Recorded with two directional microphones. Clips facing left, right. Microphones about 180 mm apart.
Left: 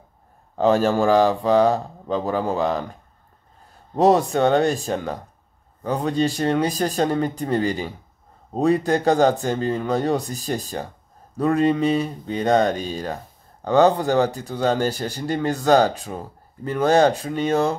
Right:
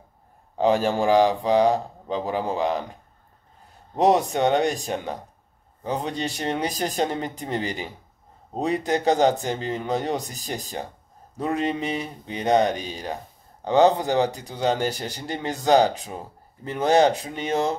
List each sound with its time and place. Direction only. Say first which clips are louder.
0.6 s speech: left 3 dB; 15° right (ahead or behind)
3.9 s speech: left 3 dB; 20° right (ahead or behind)